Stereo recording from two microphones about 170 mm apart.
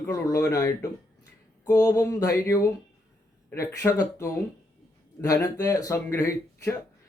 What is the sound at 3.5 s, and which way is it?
Speech, 15° left (ahead or behind).